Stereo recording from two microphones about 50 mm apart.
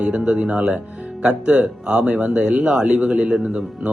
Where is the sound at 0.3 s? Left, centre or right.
Centre.